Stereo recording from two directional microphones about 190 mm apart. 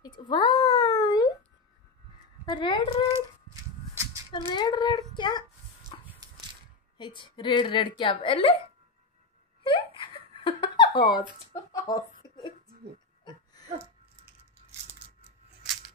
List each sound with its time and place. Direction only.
0.0 s a sound: 25° left (ahead or behind)
2.4 s speech: 25° left (ahead or behind)
3.9 s a sound: 15° right (ahead or behind)
4.3 s speech: 25° left (ahead or behind)
7.0 s speech: 25° left (ahead or behind)
9.6 s giggle: 25° left (ahead or behind)